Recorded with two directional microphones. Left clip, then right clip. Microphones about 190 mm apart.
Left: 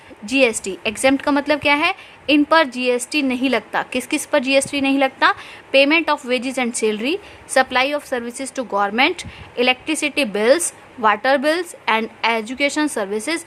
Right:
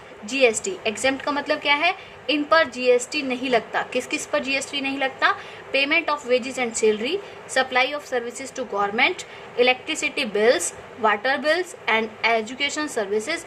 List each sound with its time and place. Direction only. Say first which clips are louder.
0.3 s a woman's voice: left 3 dB; 45° left (ahead or behind)